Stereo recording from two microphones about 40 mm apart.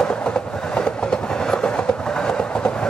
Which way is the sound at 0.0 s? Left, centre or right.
Left.